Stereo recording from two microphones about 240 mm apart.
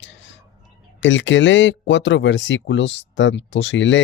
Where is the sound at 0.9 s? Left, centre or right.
Left.